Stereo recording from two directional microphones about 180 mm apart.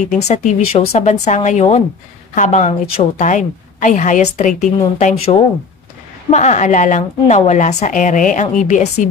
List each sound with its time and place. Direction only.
0.3 s a woman's voice: 40° left (ahead or behind)